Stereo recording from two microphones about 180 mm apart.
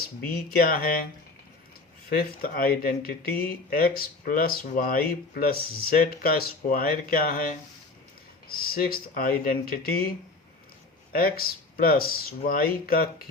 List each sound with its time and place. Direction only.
0.3 s speech: 55° left (ahead or behind)
2.0 s speech: 55° left (ahead or behind)
11.1 s speech: 55° left (ahead or behind)